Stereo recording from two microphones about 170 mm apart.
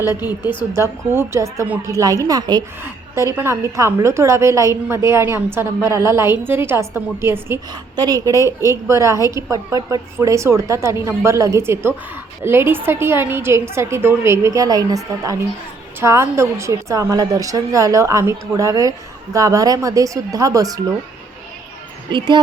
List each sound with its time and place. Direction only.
0.0 s a woman's voice: 10° right (ahead or behind)
22.1 s a woman's voice: 30° right (ahead or behind)